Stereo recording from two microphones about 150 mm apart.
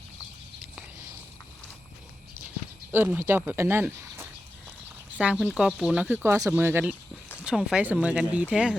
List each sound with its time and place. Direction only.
2.9 s speech: 10° right (ahead or behind)
6.2 s speech: 20° right (ahead or behind)
7.4 s speech: 5° right (ahead or behind)